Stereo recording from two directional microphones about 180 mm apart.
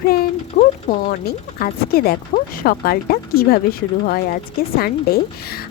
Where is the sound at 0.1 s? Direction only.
55° left (ahead or behind).